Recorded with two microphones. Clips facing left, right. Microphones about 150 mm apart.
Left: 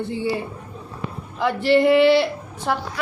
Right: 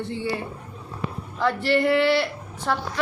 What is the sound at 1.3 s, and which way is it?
Speech, 20° left (ahead or behind).